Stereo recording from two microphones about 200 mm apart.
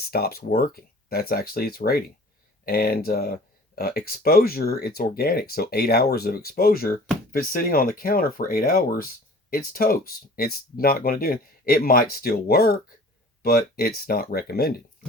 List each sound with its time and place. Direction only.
0.1 s speech: 50° left (ahead or behind)